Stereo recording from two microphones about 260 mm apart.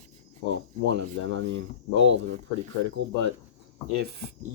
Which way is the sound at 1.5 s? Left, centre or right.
Right.